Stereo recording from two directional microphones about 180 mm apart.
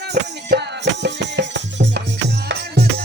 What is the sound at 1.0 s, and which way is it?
Music, 75° right (ahead or behind).